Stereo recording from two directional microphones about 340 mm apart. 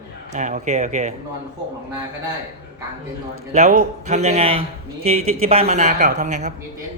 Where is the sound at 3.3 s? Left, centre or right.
Right.